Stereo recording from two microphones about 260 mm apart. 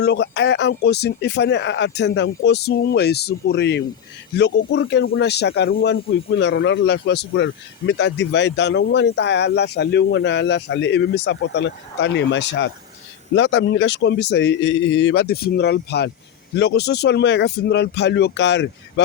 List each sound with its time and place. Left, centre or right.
0.0 s speech: left